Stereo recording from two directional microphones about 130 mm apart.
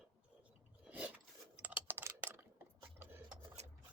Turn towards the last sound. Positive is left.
turn(degrees=-55)  # may be behind; listen again after turning